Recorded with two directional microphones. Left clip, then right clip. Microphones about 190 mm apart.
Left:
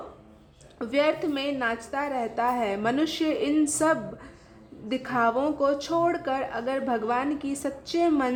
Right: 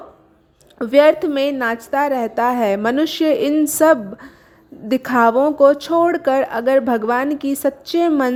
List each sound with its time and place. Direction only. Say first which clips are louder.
0.8 s a woman's voice: right 12 dB; 45° right (ahead or behind)